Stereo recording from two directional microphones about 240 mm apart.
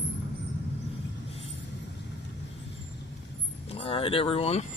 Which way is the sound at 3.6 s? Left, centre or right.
Left.